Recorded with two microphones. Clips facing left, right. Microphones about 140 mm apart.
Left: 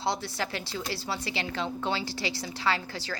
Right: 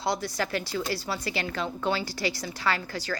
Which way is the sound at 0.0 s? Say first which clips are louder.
Right 2 dB; 25° left (ahead or behind).